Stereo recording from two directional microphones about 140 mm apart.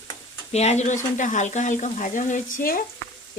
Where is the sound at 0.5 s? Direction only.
50° left (ahead or behind).